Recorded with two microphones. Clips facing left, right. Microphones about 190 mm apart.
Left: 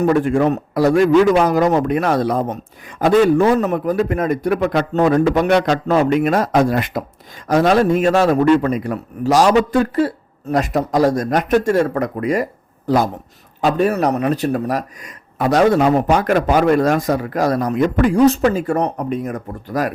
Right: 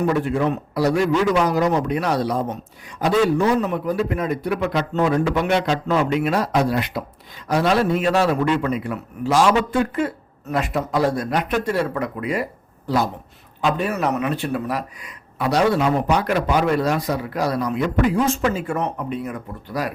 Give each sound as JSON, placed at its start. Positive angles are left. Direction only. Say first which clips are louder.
{"t": 0.0, "sound": "speech", "louder": "left 5 dB", "side_deg": 50}
{"t": 13.6, "sound": "speech", "louder": "left 6 dB", "side_deg": 40}